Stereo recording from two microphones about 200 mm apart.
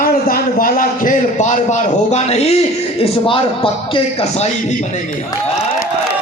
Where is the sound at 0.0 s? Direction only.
45° left (ahead or behind).